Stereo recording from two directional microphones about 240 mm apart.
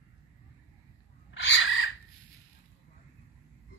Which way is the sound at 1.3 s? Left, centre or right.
Left.